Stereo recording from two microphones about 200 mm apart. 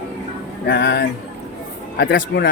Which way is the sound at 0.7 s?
55° left (ahead or behind).